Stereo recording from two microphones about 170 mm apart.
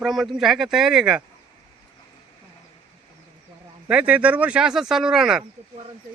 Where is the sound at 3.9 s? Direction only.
10° right (ahead or behind).